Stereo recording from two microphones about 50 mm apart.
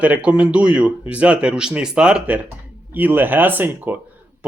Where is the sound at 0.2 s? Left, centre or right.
Right.